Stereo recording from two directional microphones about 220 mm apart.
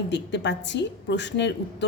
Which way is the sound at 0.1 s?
55° left (ahead or behind).